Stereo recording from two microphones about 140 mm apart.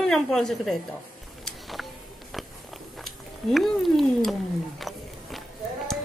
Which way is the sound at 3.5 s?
Centre (ahead or behind).